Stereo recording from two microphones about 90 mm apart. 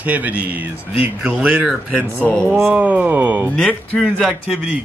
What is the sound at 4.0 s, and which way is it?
Speech, 5° left (ahead or behind).